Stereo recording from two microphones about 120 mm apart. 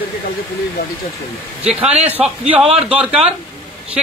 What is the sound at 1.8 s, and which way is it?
Speech, 60° right (ahead or behind).